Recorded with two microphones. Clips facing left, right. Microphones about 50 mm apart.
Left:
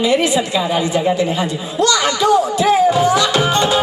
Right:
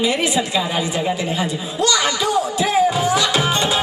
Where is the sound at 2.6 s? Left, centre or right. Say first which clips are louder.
Left 4 dB; centre.